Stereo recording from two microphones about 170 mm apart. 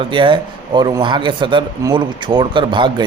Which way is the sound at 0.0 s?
30° right (ahead or behind).